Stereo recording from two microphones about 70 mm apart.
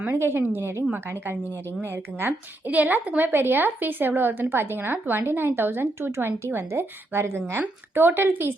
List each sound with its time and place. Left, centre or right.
0.1 s a woman's voice: right
1.8 s a woman's voice: right